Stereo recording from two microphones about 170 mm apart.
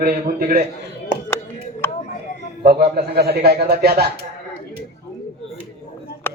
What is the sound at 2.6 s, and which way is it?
A man's voice, 65° right (ahead or behind).